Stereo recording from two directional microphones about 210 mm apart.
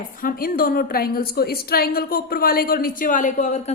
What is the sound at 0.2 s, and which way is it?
A woman's voice, 45° left (ahead or behind).